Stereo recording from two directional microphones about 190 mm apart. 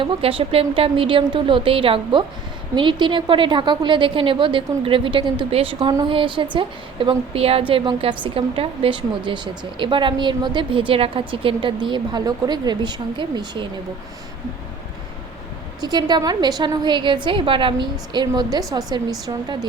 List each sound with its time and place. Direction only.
0.0 s a woman's voice: 30° right (ahead or behind)
15.8 s a woman's voice: 20° right (ahead or behind)